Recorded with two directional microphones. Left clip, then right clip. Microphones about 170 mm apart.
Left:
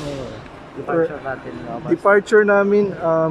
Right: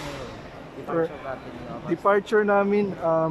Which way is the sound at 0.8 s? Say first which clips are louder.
Left 7 dB; 5° left (ahead or behind).